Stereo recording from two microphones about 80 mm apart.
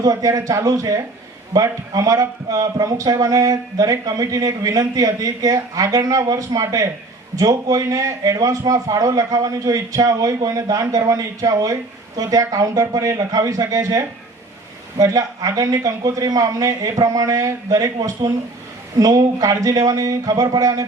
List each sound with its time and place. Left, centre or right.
0.0 s a man's voice: right